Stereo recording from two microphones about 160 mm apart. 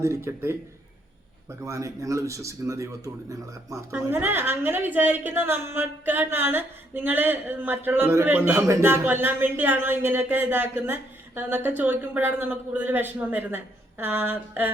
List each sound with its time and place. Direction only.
0.0 s speech: 15° right (ahead or behind)